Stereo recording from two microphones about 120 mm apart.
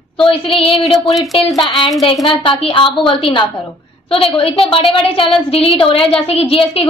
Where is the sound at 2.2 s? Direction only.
45° left (ahead or behind).